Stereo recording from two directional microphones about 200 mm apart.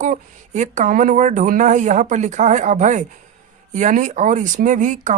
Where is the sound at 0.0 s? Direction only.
40° right (ahead or behind).